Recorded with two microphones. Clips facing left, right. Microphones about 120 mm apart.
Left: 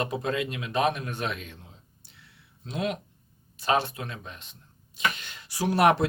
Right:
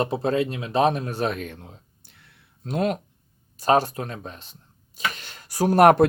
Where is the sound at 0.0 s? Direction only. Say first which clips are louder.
Right 6 dB; 35° right (ahead or behind).